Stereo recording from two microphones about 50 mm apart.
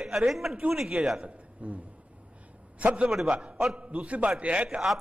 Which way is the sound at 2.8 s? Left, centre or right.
Right.